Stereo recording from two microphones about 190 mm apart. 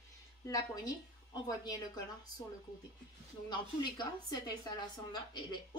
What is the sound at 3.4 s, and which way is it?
A woman's voice, 20° left (ahead or behind).